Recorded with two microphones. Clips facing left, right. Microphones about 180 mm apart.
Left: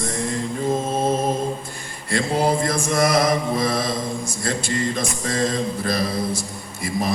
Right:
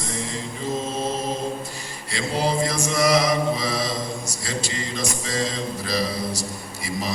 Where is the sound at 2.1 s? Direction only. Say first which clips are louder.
Left 4 dB; 55° left (ahead or behind).